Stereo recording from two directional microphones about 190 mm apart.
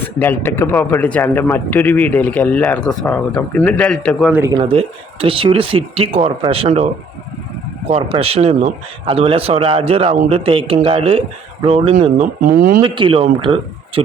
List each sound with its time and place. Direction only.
0.2 s a man's voice: 10° left (ahead or behind)
4.3 s speech: 10° right (ahead or behind)
4.5 s speech: 30° right (ahead or behind)
7.9 s a man's voice: 30° right (ahead or behind); by 12.8 s 45° right (ahead or behind)
12.8 s speech: 25° right (ahead or behind)